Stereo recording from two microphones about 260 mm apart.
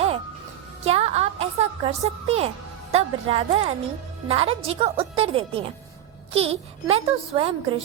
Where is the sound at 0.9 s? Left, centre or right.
Right.